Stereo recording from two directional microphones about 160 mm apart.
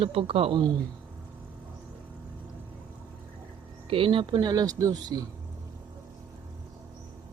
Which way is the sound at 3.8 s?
35° right (ahead or behind).